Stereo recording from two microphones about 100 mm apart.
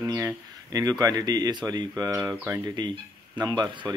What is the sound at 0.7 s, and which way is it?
Speech, 35° right (ahead or behind).